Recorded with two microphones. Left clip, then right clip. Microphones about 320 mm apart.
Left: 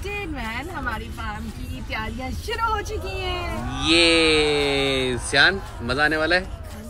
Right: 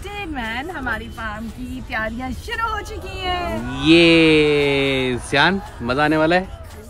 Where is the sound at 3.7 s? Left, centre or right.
Centre.